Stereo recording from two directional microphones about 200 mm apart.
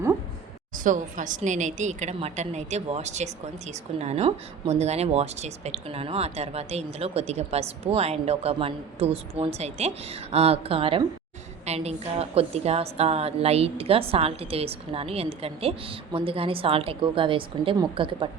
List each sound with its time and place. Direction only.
0.9 s a woman's voice: 40° right (ahead or behind)